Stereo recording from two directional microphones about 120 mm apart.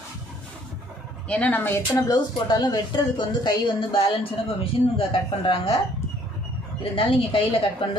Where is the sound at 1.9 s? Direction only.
35° left (ahead or behind).